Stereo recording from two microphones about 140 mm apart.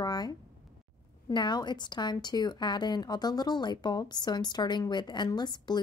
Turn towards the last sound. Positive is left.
turn(degrees=30)  # may be behind; listen again after turning